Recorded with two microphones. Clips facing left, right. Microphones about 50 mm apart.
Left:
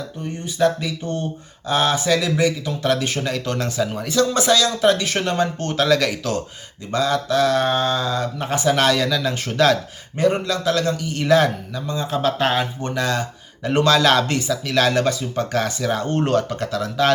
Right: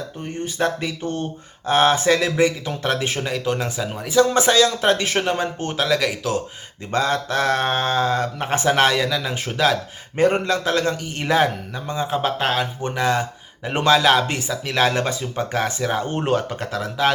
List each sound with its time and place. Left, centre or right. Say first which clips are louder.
0.4 s speech: left 3 dB; right
3.2 s speech: even; centre
4.3 s speech: right 1 dB; right
5.1 s speech: left 1 dB; centre
6.9 s speech: left 1 dB; right
9.0 s speech: left 1 dB; centre
10.2 s speech: right 1 dB; right